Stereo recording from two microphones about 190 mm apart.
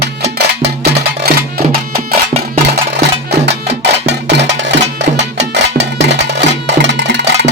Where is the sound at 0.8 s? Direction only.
55° right (ahead or behind).